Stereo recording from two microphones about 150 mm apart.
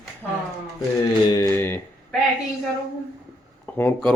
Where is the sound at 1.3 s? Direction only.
20° left (ahead or behind).